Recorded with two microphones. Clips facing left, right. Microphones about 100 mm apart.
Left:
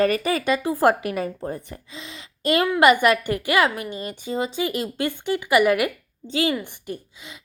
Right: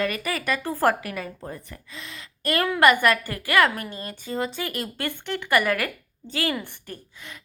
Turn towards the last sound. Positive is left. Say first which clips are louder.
# left 6 dB
turn(degrees=15)  # may be behind; listen again after turning